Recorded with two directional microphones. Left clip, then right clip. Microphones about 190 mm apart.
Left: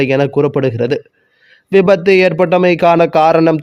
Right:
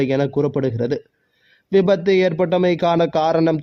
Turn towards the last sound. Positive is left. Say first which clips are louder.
# left 8 dB
turn(degrees=25)  # may be behind; listen again after turning